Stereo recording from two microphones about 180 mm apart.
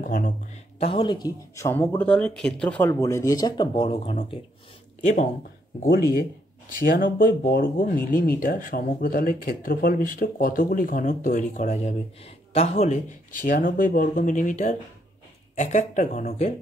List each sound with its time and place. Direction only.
0.0 s speech: 50° left (ahead or behind)
0.7 s speech: 35° left (ahead or behind)
5.0 s speech: 45° left (ahead or behind)
7.0 s speech: 50° left (ahead or behind)
13.5 s speech: 50° left (ahead or behind)